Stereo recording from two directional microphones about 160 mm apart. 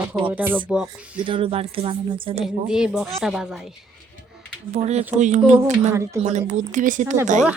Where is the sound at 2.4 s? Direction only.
5° right (ahead or behind).